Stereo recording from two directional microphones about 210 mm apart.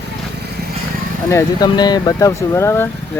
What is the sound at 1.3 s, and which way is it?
Speech, 20° left (ahead or behind).